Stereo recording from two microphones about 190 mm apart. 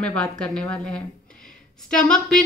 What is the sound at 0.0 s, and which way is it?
Speech, 5° left (ahead or behind).